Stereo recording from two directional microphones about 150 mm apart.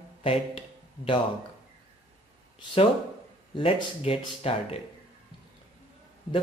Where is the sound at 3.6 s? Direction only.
40° left (ahead or behind).